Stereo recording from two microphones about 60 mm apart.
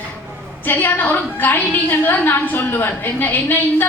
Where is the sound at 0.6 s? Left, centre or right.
Left.